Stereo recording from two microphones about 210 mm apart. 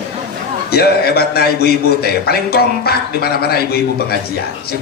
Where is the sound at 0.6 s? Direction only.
50° left (ahead or behind).